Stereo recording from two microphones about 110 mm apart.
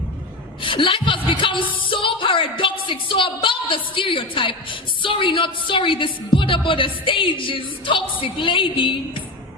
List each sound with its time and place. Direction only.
0.6 s a woman's voice: 50° left (ahead or behind)